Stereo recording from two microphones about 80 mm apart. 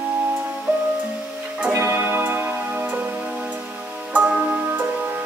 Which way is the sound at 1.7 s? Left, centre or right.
Right.